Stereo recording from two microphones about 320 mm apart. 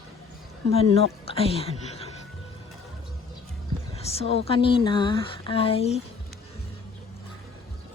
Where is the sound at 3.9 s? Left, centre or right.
Centre.